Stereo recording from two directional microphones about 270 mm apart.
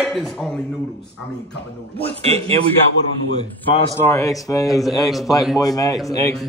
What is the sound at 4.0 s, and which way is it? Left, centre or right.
Mantra, centre.